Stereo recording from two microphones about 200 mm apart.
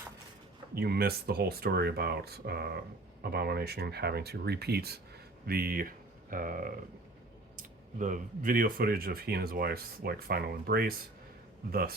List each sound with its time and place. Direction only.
0.7 s speech: 50° right (ahead or behind)